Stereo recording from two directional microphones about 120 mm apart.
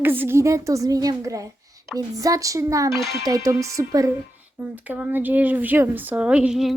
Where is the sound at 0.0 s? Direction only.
15° right (ahead or behind).